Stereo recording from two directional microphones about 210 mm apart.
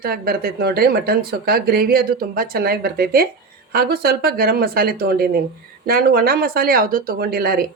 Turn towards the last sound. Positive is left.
turn(degrees=-45)  # may be behind; listen again after turning